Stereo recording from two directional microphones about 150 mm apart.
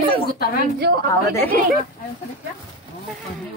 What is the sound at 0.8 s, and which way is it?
Speech, 90° right.